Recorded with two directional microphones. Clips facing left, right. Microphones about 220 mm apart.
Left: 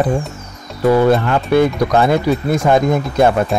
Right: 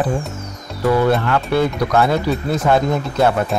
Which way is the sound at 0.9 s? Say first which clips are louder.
Left 3 dB; 25° left (ahead or behind).